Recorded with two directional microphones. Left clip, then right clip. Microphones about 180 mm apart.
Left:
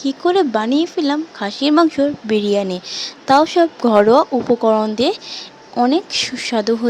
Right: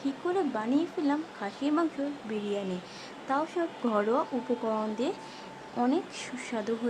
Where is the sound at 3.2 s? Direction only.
45° left (ahead or behind).